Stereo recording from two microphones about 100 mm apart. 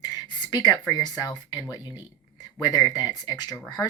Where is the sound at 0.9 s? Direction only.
45° left (ahead or behind).